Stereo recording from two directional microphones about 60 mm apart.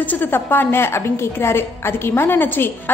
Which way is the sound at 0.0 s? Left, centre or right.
Left.